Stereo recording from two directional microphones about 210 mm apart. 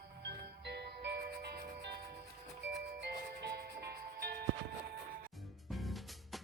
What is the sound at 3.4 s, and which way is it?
Music, 50° right (ahead or behind).